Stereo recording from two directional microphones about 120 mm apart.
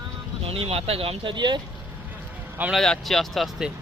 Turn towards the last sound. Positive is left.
turn(degrees=0)  # may be behind; listen again after turning